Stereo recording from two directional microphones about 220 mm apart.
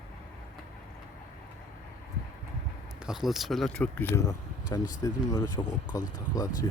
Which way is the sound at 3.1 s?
Centre (ahead or behind).